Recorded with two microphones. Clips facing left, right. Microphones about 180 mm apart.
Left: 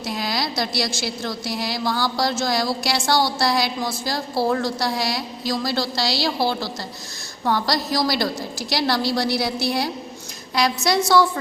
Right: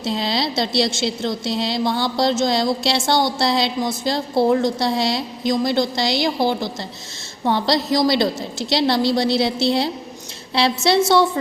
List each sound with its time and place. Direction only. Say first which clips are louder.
0.0 s a woman's voice: right 4 dB; 25° right (ahead or behind)